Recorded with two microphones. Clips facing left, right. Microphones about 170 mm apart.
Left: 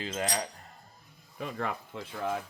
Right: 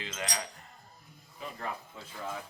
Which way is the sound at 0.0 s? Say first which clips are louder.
Left 5 dB; 40° left (ahead or behind).